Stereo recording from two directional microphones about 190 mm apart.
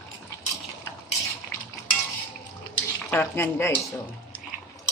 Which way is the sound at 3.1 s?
10° left (ahead or behind).